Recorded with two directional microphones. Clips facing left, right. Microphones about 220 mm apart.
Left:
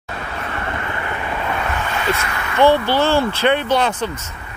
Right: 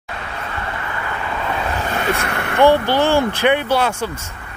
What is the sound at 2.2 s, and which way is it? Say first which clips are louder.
Speech: right 2 dB; 60° right (ahead or behind).